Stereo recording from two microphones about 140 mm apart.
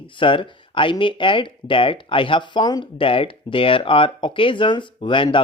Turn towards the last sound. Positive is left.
turn(degrees=35)  # may be behind; listen again after turning